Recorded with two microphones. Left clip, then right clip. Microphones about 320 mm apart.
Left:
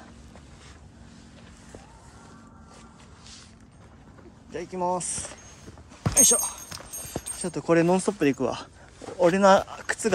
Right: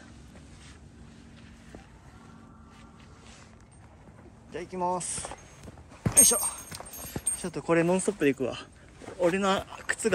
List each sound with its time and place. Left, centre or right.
4.5 s speech: centre